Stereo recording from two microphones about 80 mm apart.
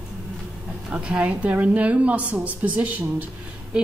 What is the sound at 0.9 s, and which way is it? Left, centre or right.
A woman's voice, centre.